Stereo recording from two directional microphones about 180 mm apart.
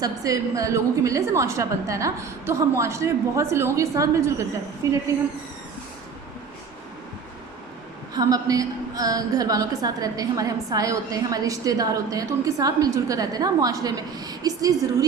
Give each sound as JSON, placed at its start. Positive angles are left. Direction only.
{"t": 0.0, "sound": "a woman's voice", "side_deg": -20}
{"t": 8.1, "sound": "a woman's voice", "side_deg": -20}